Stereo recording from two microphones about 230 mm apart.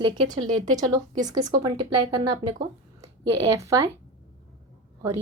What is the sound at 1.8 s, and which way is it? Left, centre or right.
Speech, right.